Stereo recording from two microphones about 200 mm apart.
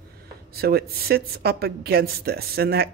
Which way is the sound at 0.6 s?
50° right (ahead or behind).